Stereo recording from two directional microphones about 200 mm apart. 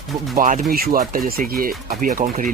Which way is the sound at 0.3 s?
40° right (ahead or behind).